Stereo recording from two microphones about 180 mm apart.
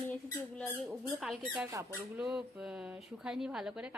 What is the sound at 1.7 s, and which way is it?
Speech, 15° right (ahead or behind).